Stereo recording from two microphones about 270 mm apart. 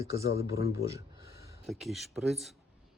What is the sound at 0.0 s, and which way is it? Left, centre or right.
Speech, centre.